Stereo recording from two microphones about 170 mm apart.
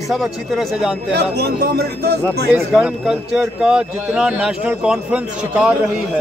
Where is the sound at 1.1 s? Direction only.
70° right (ahead or behind).